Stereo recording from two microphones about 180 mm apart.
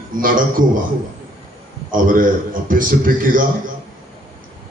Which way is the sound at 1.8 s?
50° right (ahead or behind).